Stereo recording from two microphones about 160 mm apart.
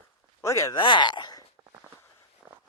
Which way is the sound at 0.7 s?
30° left (ahead or behind).